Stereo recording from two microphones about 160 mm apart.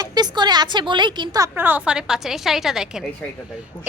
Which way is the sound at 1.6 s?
10° right (ahead or behind).